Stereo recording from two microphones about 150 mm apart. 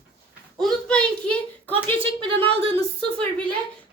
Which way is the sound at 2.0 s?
40° right (ahead or behind).